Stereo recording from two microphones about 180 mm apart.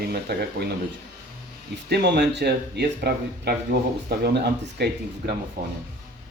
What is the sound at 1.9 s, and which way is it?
Speech, 65° right (ahead or behind).